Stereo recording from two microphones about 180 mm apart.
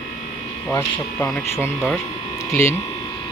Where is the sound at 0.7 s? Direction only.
15° left (ahead or behind).